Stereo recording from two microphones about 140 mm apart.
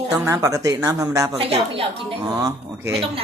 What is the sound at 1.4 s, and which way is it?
Speech, 40° right (ahead or behind).